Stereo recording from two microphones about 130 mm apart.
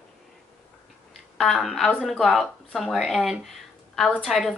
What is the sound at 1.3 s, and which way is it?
Speech, centre (ahead or behind).